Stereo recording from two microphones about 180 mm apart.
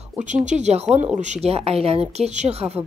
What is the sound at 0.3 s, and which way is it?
A woman's voice, 40° right (ahead or behind).